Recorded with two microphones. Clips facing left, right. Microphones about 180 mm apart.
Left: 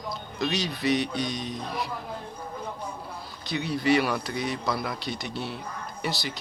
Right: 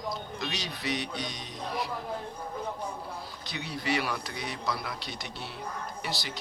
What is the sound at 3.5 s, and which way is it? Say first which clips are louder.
A man's voice: left 8 dB; 55° left (ahead or behind).